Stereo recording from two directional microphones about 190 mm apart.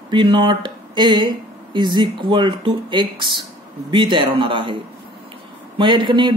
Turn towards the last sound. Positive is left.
turn(degrees=-25)  # may be behind; listen again after turning